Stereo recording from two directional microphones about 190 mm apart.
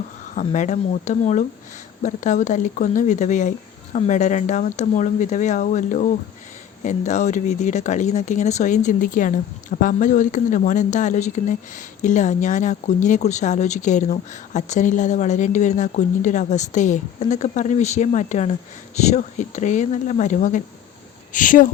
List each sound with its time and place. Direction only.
0.3 s speech: 40° left (ahead or behind)